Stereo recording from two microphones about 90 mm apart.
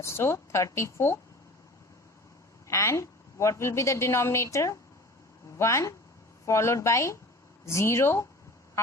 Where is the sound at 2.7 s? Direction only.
35° left (ahead or behind).